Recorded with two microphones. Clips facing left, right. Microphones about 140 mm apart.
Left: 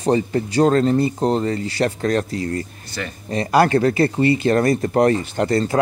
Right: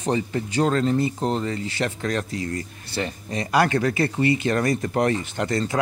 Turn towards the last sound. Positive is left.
turn(degrees=35)  # may be behind; listen again after turning